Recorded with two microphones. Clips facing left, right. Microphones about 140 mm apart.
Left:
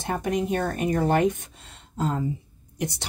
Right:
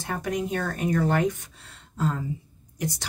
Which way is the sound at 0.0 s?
25° left (ahead or behind).